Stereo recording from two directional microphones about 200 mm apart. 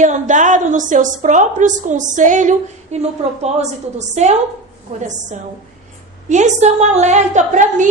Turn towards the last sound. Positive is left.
turn(degrees=-40)  # may be behind; listen again after turning